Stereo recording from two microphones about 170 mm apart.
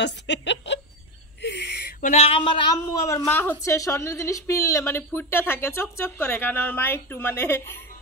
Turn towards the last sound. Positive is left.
turn(degrees=15)  # may be behind; listen again after turning